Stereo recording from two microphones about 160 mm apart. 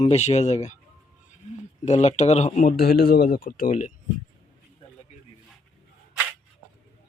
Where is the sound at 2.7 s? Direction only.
75° left (ahead or behind); by 3.9 s 50° left (ahead or behind).